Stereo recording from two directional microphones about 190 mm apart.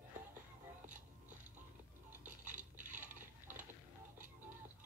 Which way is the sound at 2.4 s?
40° right (ahead or behind).